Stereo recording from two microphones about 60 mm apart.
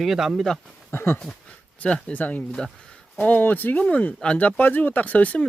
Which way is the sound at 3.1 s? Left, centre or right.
Left.